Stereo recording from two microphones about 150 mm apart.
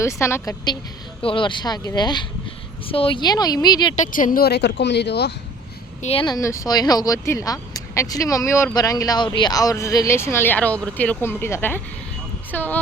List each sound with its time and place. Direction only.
0.0 s speech: 20° left (ahead or behind)
1.2 s speech: 35° left (ahead or behind)
3.9 s speech: 65° left (ahead or behind); by 5.3 s 90° left
6.0 s speech: 45° left (ahead or behind)
6.2 s speech: 20° left (ahead or behind)